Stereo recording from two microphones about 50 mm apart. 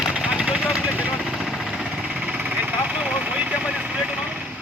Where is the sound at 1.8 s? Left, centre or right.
Right.